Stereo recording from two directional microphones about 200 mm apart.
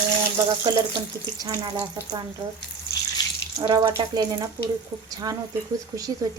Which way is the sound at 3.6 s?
25° right (ahead or behind).